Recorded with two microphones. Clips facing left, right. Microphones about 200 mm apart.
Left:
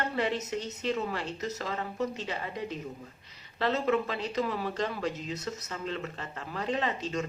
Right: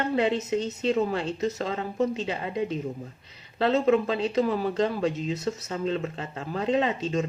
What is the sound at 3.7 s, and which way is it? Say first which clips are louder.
Speech: right 6 dB; 25° right (ahead or behind).